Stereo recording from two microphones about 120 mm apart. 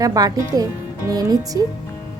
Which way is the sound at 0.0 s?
30° right (ahead or behind).